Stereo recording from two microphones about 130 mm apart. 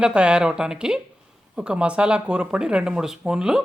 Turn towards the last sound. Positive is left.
turn(degrees=-5)  # may be behind; listen again after turning